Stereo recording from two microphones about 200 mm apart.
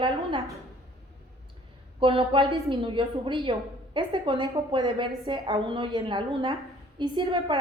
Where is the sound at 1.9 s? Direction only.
25° right (ahead or behind).